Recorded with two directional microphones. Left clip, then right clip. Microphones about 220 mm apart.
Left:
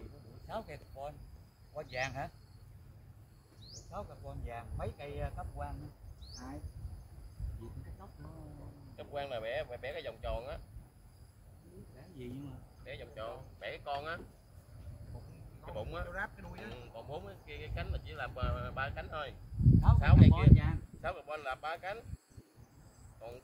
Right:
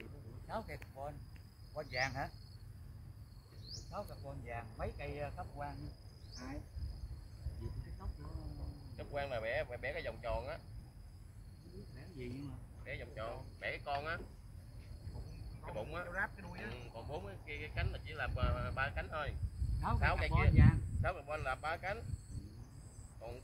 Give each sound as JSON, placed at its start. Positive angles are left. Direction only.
{"t": 0.5, "sound": "speech", "side_deg": 45}
{"t": 3.9, "sound": "speech", "side_deg": 50}
{"t": 8.9, "sound": "speech", "side_deg": 50}
{"t": 12.8, "sound": "speech", "side_deg": 50}
{"t": 15.6, "sound": "speech", "side_deg": 50}